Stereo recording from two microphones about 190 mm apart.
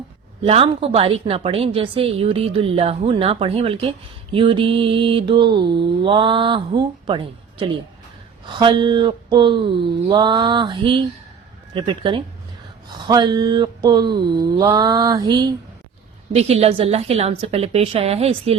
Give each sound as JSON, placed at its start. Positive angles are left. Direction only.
{"t": 0.4, "sound": "a woman's voice", "side_deg": -30}
{"t": 16.3, "sound": "a woman's voice", "side_deg": -35}